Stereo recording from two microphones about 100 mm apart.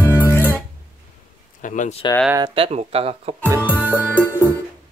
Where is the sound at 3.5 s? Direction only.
20° right (ahead or behind).